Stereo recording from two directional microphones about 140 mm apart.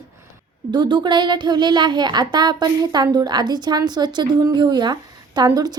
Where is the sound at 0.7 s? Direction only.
35° right (ahead or behind).